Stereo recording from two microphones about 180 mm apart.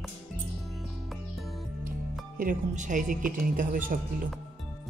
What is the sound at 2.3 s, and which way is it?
Speech, 45° right (ahead or behind).